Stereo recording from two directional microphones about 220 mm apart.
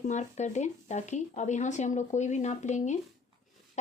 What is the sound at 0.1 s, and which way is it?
Speech, 30° left (ahead or behind).